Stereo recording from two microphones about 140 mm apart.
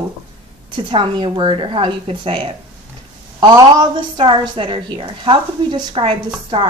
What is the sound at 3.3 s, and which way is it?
A woman's voice, 25° right (ahead or behind).